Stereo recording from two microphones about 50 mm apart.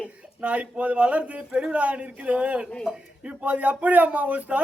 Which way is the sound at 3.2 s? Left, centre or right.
Right.